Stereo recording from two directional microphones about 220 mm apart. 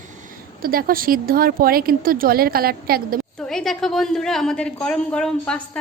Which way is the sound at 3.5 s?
Centre (ahead or behind).